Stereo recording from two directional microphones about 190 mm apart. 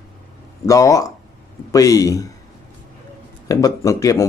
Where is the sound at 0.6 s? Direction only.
15° left (ahead or behind).